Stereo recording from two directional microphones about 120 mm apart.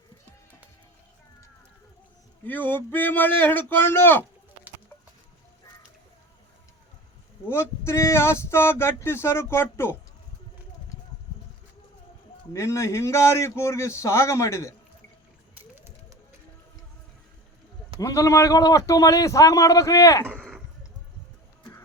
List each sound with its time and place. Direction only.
2.5 s speech: 15° left (ahead or behind)
7.4 s speech: 20° left (ahead or behind)
12.5 s speech: 25° left (ahead or behind)
15.5 s a sound: 15° right (ahead or behind)
18.0 s speech: 25° left (ahead or behind)
20.3 s a sound: centre (ahead or behind)